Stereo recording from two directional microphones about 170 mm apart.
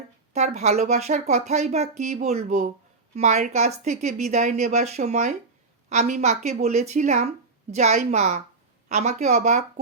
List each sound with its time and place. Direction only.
0.3 s speech: 40° right (ahead or behind)